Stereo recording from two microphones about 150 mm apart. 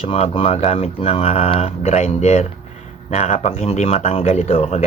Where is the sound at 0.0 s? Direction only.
40° left (ahead or behind).